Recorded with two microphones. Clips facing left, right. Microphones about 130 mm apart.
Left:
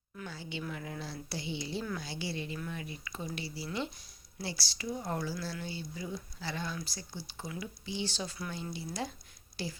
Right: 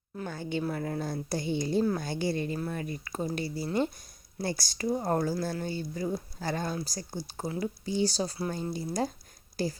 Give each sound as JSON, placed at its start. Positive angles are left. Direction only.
{"t": 0.3, "sound": "a woman's voice", "side_deg": -50}